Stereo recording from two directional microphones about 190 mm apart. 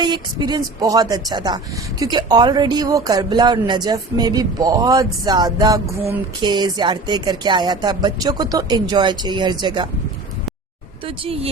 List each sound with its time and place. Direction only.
0.0 s speech: 20° right (ahead or behind)
11.0 s speech: 30° right (ahead or behind)